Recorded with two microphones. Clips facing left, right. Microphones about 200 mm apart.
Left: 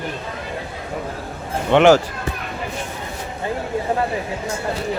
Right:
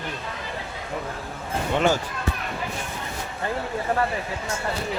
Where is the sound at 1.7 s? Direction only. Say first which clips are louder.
Left 10 dB; 75° left (ahead or behind).